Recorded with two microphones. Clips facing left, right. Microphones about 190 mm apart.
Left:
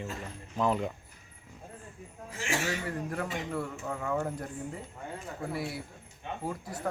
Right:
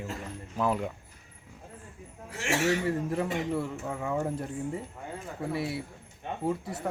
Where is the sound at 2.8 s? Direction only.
25° right (ahead or behind).